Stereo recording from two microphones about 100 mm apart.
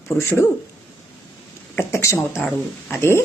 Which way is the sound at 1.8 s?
25° left (ahead or behind).